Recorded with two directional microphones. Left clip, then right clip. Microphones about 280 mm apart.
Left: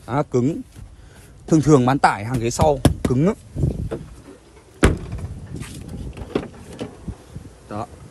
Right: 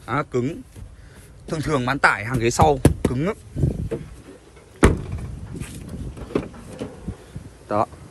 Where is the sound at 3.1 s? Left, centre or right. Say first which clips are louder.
Left 5 dB; left.